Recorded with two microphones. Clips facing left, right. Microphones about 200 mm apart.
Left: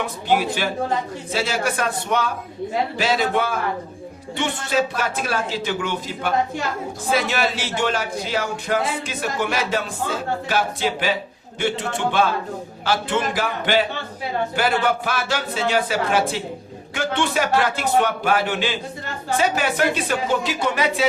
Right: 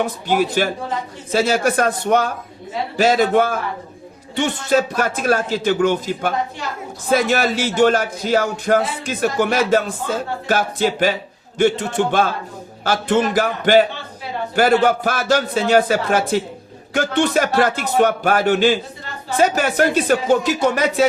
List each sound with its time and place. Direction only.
0.0 s music: 45° right (ahead or behind)